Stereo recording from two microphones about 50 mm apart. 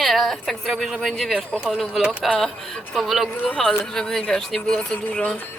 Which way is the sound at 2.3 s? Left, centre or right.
Centre.